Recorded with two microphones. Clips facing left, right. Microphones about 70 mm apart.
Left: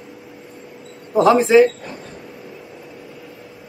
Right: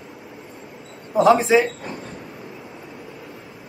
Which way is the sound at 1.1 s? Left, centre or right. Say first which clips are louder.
Left 3 dB; centre.